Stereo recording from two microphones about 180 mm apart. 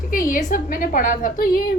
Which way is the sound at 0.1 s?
50° left (ahead or behind).